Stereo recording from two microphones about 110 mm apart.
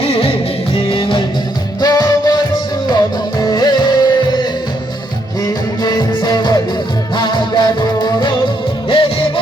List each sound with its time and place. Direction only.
0.9 s music: 50° left (ahead or behind)
1.8 s music: 35° left (ahead or behind)
5.8 s music: 40° left (ahead or behind)
8.9 s music: 55° left (ahead or behind)